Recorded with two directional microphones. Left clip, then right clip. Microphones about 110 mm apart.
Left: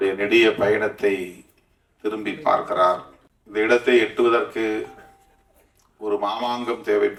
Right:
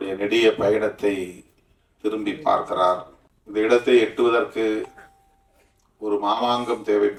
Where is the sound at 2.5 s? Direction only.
15° right (ahead or behind).